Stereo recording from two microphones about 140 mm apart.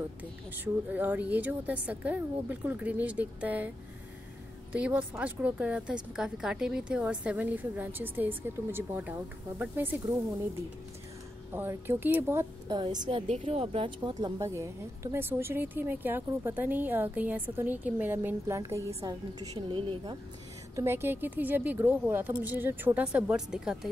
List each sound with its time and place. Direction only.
0.9 s a woman's voice: 15° right (ahead or behind)
4.7 s a woman's voice: 10° right (ahead or behind)
11.5 s a woman's voice: 15° right (ahead or behind)
12.7 s a woman's voice: 30° right (ahead or behind)
13.3 s a woman's voice: 50° right (ahead or behind)
14.4 s a woman's voice: 20° right (ahead or behind)
20.7 s a woman's voice: 15° right (ahead or behind)